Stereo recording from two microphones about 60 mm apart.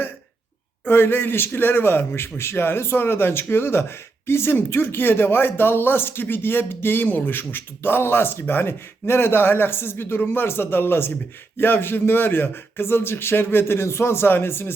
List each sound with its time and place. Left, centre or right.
0.9 s speech: left